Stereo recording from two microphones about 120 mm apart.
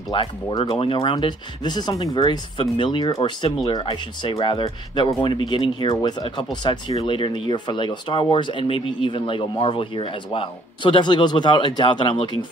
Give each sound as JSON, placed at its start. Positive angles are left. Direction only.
{"t": 0.1, "sound": "speech", "side_deg": 45}